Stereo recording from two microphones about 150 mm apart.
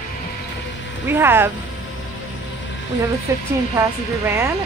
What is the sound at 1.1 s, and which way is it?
Speech, 15° right (ahead or behind).